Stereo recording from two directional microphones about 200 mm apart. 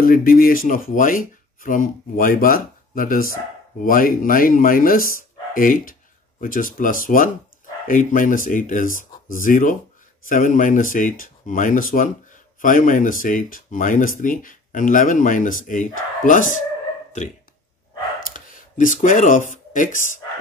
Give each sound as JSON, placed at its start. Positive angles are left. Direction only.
{"t": 0.0, "sound": "speech", "side_deg": 45}
{"t": 18.2, "sound": "speech", "side_deg": 40}